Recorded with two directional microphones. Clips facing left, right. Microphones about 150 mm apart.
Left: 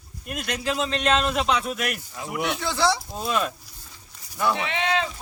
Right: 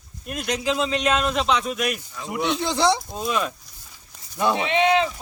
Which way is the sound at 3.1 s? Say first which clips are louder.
Right 1 dB; 5° left (ahead or behind).